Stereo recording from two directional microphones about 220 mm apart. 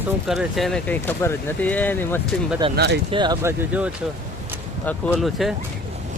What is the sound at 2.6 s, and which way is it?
Speech, 20° right (ahead or behind).